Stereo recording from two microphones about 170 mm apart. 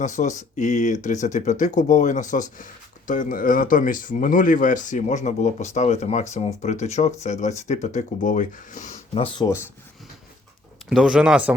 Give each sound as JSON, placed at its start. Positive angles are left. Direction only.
{"t": 0.0, "sound": "speech", "side_deg": 45}
{"t": 9.2, "sound": "speech", "side_deg": 30}
{"t": 10.8, "sound": "speech", "side_deg": -5}